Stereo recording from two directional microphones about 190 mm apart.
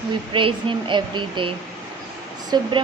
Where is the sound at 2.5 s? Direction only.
20° right (ahead or behind).